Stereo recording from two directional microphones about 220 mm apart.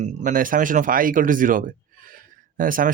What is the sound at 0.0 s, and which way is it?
Speech, 35° right (ahead or behind).